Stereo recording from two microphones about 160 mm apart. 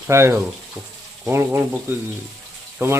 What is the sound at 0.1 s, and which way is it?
Speech, 15° right (ahead or behind).